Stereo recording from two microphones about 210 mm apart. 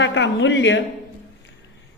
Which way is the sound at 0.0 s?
60° left (ahead or behind).